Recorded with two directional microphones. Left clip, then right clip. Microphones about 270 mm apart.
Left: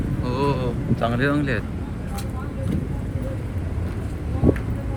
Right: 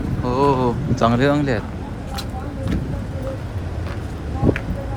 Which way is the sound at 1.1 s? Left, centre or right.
Centre.